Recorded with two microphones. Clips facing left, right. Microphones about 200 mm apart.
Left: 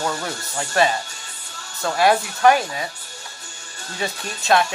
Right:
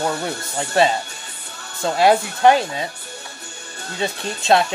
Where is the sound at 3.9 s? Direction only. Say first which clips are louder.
Right 3 dB; 25° right (ahead or behind).